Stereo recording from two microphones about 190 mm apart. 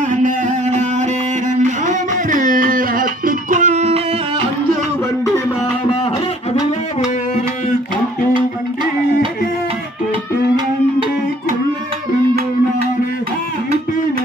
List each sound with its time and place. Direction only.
0.1 s music: 40° right (ahead or behind)